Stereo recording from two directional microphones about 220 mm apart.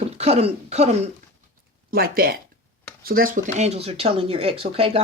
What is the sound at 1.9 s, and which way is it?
Speech, 40° right (ahead or behind).